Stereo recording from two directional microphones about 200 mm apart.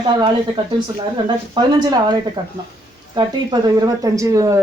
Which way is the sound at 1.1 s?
20° right (ahead or behind).